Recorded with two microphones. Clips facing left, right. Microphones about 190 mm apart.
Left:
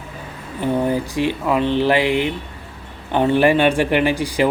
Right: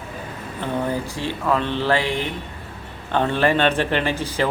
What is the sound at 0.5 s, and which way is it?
Speech, 15° left (ahead or behind).